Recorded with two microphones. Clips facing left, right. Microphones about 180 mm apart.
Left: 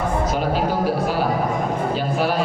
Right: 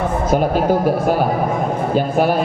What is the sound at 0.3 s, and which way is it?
A man's voice, 50° right (ahead or behind).